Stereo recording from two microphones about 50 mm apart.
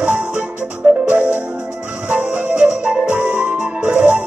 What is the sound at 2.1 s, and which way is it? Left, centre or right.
Music, right.